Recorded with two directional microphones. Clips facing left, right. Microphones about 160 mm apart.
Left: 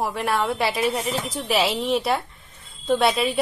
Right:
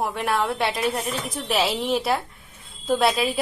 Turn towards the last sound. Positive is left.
turn(degrees=0)  # may be behind; listen again after turning